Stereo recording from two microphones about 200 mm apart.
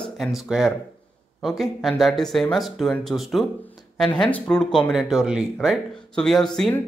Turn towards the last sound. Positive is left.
turn(degrees=0)  # may be behind; listen again after turning